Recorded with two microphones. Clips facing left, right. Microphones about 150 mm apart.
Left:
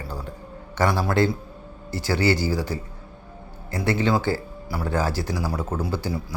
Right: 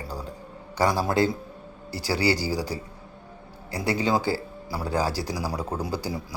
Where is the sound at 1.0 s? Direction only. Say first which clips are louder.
Left 2 dB; 20° right (ahead or behind).